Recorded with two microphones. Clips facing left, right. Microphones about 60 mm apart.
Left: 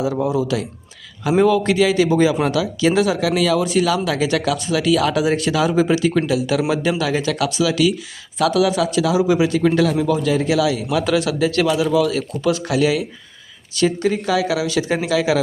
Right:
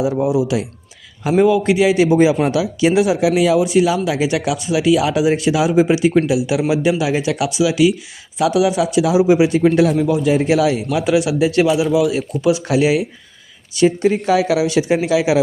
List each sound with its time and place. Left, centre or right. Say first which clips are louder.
0.2 s speech: right 3 dB; centre; by 10.8 s right
10.9 s speech: right 2 dB; centre